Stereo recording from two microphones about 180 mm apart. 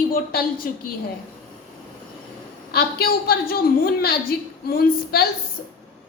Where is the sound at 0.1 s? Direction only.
55° left (ahead or behind).